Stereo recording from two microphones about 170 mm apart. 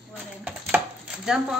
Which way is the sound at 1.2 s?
5° right (ahead or behind).